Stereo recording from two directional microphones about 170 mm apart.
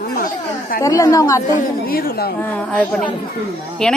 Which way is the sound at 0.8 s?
20° left (ahead or behind).